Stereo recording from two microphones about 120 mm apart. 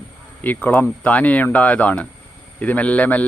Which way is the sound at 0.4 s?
15° left (ahead or behind).